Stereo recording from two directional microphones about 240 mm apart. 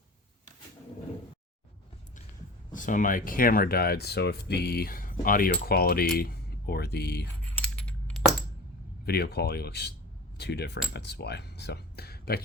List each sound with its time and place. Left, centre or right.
2.7 s speech: left
7.6 s coin: centre
9.0 s speech: left